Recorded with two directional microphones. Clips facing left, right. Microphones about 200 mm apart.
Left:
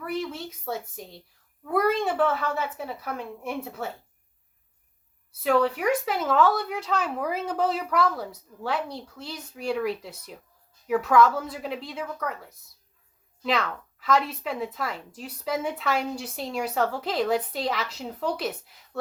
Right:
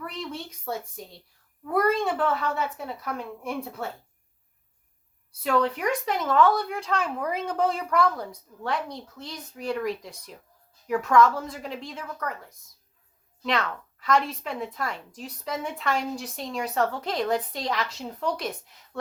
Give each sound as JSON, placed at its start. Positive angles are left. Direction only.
{"t": 0.1, "sound": "a woman's voice", "side_deg": 5}
{"t": 5.4, "sound": "a woman's voice", "side_deg": 5}